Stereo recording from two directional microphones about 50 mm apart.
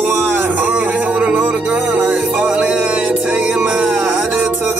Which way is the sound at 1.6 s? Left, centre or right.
Right.